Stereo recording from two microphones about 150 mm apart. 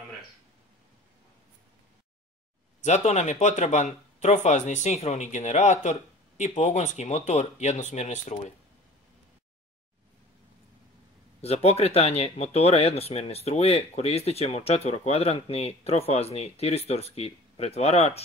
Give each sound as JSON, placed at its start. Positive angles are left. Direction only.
{"t": 2.8, "sound": "speech", "side_deg": 50}
{"t": 11.4, "sound": "speech", "side_deg": 45}